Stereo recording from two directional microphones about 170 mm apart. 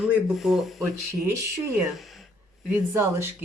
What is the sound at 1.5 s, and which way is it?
Speech, 15° right (ahead or behind).